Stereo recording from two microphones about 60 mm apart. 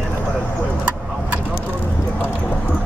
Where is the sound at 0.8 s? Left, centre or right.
Right.